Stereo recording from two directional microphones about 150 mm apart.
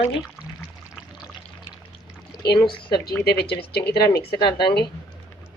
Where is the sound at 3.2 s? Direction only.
90° left.